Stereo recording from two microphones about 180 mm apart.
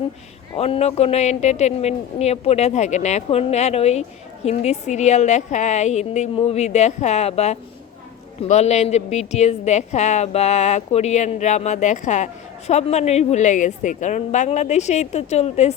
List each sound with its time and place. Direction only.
0.5 s a woman's voice: 35° left (ahead or behind)